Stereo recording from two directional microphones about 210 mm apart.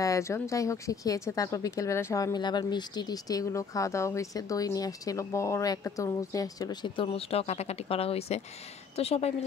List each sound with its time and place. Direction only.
0.0 s speech: 15° left (ahead or behind)